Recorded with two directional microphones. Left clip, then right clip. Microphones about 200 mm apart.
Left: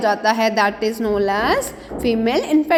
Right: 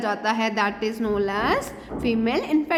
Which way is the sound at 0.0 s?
15° left (ahead or behind).